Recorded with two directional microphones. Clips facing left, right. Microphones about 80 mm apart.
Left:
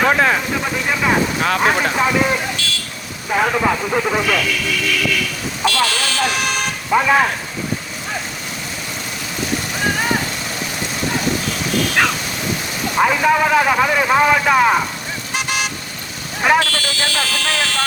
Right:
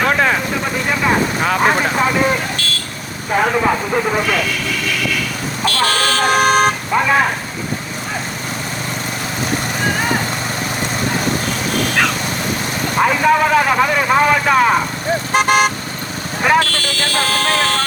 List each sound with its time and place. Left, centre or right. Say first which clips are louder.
0.0 s speech: even; centre
2.6 s speech: right 2 dB; right
3.3 s speech: right 2 dB; centre
5.6 s speech: right 2 dB; right
6.9 s speech: left 3 dB; centre
13.0 s speech: right 1 dB; centre
15.3 s speech: right 9 dB; right